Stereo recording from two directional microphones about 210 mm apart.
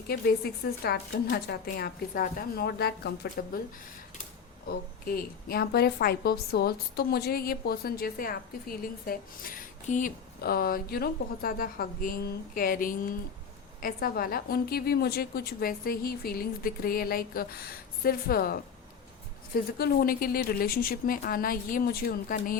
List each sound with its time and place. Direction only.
0.1 s a woman's voice: 50° left (ahead or behind)
4.7 s a woman's voice: 45° left (ahead or behind)